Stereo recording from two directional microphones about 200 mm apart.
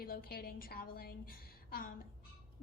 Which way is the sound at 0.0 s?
50° left (ahead or behind).